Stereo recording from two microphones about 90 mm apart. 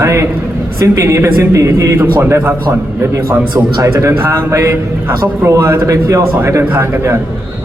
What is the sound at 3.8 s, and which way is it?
A man's voice, 35° right (ahead or behind).